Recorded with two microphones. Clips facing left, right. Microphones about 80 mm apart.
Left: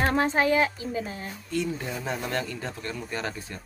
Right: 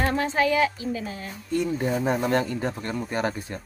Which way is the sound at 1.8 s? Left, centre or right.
Right.